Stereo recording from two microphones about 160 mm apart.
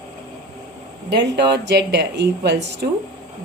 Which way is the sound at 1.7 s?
90° right.